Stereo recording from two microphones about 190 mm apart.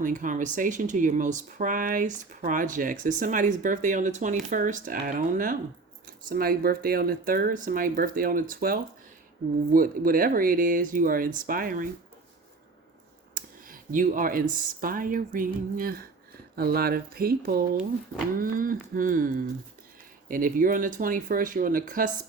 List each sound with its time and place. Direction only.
0.0 s speech: 45° right (ahead or behind)
13.3 s a sound: 45° right (ahead or behind)
14.5 s speech: 50° right (ahead or behind)